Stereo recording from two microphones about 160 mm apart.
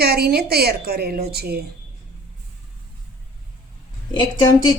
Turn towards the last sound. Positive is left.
turn(degrees=25)  # may be behind; listen again after turning